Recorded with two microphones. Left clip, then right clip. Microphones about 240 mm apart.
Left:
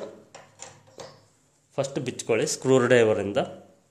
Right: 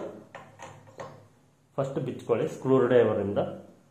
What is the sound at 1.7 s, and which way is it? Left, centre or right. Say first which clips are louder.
A man's voice: left 2 dB; left.